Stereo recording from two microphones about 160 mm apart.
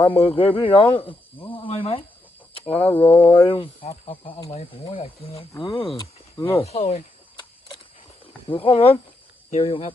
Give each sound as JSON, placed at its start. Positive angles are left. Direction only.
{"t": 0.1, "sound": "speech", "side_deg": 35}
{"t": 1.5, "sound": "snake", "side_deg": 35}
{"t": 2.6, "sound": "speech", "side_deg": 35}
{"t": 8.4, "sound": "speech", "side_deg": 35}